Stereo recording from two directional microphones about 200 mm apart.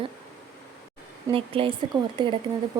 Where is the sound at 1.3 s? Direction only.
25° right (ahead or behind).